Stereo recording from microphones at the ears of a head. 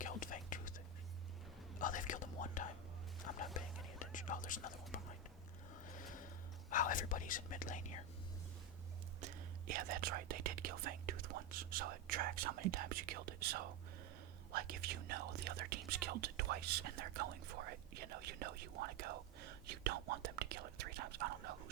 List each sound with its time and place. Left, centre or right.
0.0 s whispering: left
1.8 s whispering: left
9.2 s speech: right